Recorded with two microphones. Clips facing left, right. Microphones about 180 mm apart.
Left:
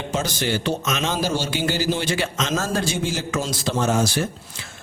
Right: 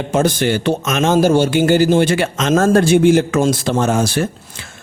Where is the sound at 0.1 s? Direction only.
55° right (ahead or behind).